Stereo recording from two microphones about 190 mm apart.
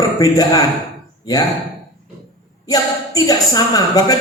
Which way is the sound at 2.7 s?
20° left (ahead or behind).